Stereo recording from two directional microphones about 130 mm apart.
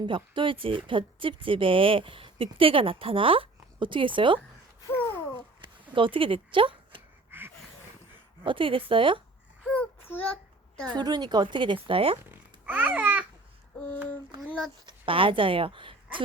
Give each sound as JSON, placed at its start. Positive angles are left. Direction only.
{"t": 0.0, "sound": "speech", "side_deg": -40}
{"t": 4.9, "sound": "babbling", "side_deg": 15}
{"t": 5.3, "sound": "a sound", "side_deg": -35}
{"t": 7.3, "sound": "a sound", "side_deg": -15}
{"t": 8.4, "sound": "a woman's voice", "side_deg": -40}
{"t": 9.6, "sound": "a sound", "side_deg": 10}
{"t": 10.9, "sound": "a woman's voice", "side_deg": -35}
{"t": 12.3, "sound": "babbling", "side_deg": -15}
{"t": 14.8, "sound": "speech", "side_deg": -45}